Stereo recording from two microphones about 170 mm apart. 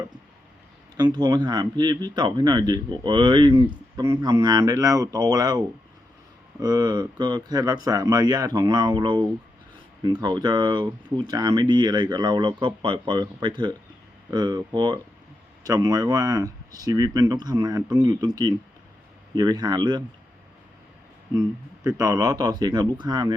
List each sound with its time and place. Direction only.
0.9 s speech: 25° right (ahead or behind)
21.8 s speech: 20° right (ahead or behind)